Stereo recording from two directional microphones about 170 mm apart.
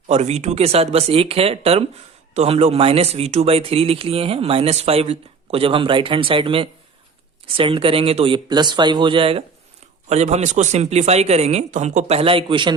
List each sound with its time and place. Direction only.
0.1 s speech: 40° right (ahead or behind)